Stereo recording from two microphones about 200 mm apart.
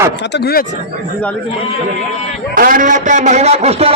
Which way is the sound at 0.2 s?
55° left (ahead or behind).